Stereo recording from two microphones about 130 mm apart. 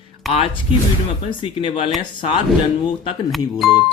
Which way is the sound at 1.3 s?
40° left (ahead or behind).